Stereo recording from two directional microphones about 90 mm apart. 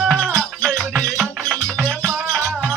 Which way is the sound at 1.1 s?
Centre (ahead or behind).